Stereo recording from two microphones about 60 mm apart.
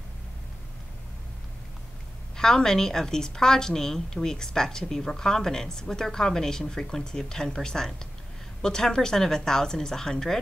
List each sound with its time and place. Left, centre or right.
2.3 s a woman's voice: centre